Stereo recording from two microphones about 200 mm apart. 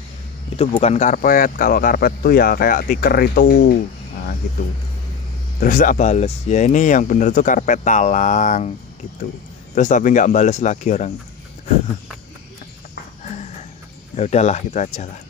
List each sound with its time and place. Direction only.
0.6 s speech: 30° left (ahead or behind); by 3.7 s 50° left (ahead or behind)
5.6 s speech: 40° left (ahead or behind)
9.8 s speech: 40° left (ahead or behind)
14.1 s speech: 35° left (ahead or behind)